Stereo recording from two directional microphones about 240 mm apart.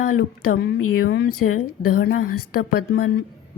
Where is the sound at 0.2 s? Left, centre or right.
Left.